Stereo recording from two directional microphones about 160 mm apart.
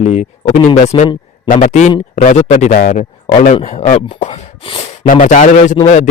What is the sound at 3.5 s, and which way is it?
Speech, 40° left (ahead or behind).